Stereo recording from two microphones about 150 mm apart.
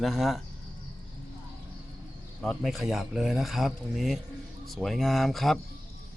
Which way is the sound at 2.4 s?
Centre (ahead or behind).